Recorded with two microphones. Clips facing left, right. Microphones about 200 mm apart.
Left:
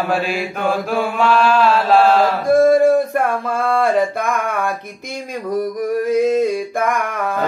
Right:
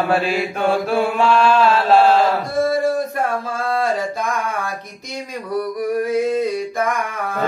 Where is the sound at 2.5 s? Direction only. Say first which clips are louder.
Left 7 dB; 55° left (ahead or behind).